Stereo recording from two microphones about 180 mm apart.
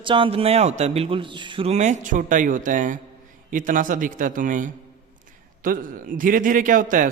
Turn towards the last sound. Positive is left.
turn(degrees=-50)  # may be behind; listen again after turning